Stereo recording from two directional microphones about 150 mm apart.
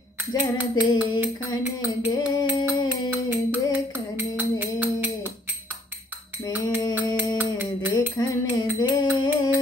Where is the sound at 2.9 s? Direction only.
15° right (ahead or behind).